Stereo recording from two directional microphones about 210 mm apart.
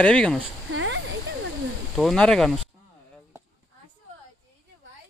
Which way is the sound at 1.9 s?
Centre (ahead or behind).